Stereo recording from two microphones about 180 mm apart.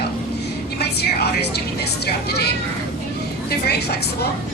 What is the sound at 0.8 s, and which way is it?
Music, 65° left (ahead or behind).